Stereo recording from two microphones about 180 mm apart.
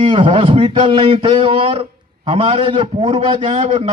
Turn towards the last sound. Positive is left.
turn(degrees=-35)  # may be behind; listen again after turning